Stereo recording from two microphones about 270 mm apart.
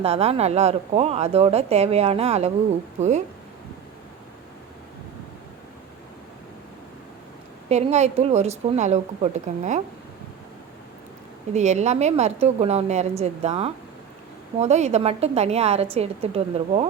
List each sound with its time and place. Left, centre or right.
0.0 s speech: right
7.7 s speech: right
11.5 s speech: right